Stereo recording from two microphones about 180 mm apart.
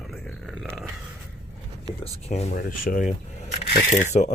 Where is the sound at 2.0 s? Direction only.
35° left (ahead or behind).